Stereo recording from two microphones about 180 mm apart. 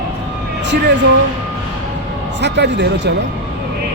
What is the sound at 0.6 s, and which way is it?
Speech, 80° right.